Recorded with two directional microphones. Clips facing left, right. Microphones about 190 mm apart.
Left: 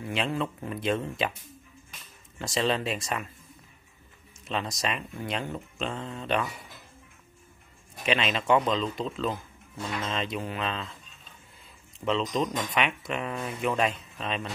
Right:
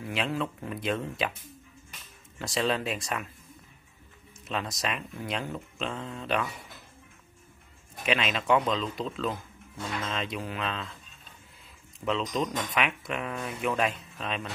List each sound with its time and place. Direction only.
0.0 s speech: centre (ahead or behind)
2.3 s speech: centre (ahead or behind)
4.5 s speech: centre (ahead or behind)
8.0 s speech: centre (ahead or behind)
12.0 s speech: centre (ahead or behind)